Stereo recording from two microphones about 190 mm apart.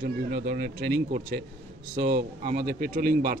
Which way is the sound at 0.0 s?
55° right (ahead or behind).